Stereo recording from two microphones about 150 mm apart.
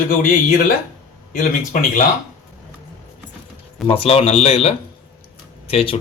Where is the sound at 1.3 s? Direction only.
60° left (ahead or behind).